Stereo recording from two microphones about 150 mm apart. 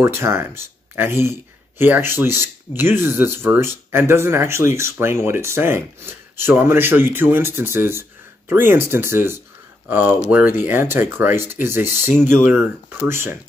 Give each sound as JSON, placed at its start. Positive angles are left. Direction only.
{"t": 0.0, "sound": "speech", "side_deg": -15}